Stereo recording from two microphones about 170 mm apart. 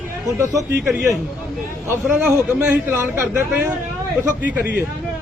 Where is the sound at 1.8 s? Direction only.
10° right (ahead or behind).